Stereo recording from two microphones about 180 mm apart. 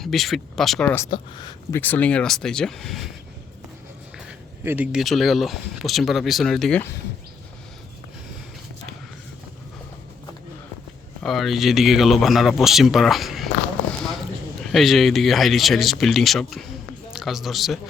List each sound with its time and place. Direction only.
0.0 s speech: centre (ahead or behind)
1.0 s speech: 25° left (ahead or behind)
1.7 s speech: 10° left (ahead or behind)
4.3 s speech: 10° right (ahead or behind)
11.2 s speech: centre (ahead or behind)
14.6 s a man's voice: centre (ahead or behind)